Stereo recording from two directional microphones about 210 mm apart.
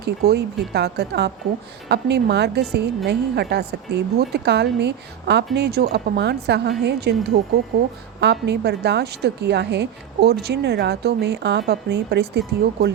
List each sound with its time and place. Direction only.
0.0 s a woman's voice: 50° right (ahead or behind)